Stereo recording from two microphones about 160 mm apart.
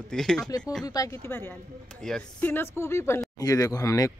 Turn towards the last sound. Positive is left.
turn(degrees=20)  # may be behind; listen again after turning